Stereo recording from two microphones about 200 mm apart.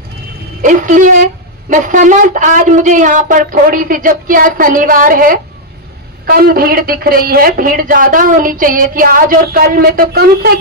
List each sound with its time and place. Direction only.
0.6 s a woman's voice: 40° right (ahead or behind)